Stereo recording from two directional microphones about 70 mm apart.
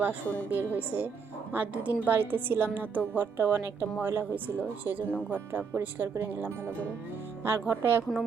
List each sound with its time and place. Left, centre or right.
0.0 s a woman's voice: right